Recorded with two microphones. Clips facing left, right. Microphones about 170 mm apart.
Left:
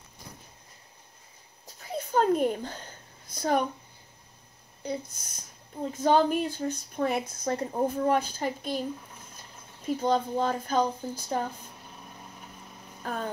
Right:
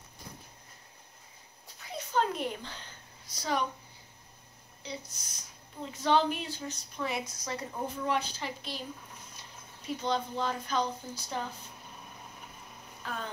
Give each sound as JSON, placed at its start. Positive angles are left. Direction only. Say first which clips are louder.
{"t": 1.9, "sound": "a sound", "louder": "left 6 dB", "side_deg": 45}
{"t": 4.8, "sound": "a woman's voice", "louder": "left 8 dB", "side_deg": 50}
{"t": 7.7, "sound": "a woman's voice", "louder": "left 7 dB", "side_deg": 45}
{"t": 9.9, "sound": "a woman's voice", "louder": "left 6 dB", "side_deg": 45}
{"t": 13.0, "sound": "vehicle", "louder": "left 6 dB", "side_deg": 45}